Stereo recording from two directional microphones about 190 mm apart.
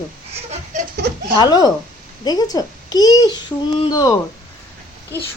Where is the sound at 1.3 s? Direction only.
20° left (ahead or behind).